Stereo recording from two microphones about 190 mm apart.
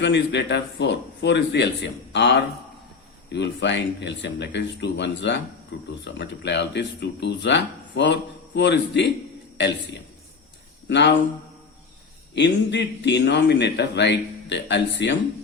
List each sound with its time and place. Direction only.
0.0 s a man's voice: 65° left (ahead or behind)
10.8 s a man's voice: 65° left (ahead or behind)
12.3 s speech: 65° left (ahead or behind)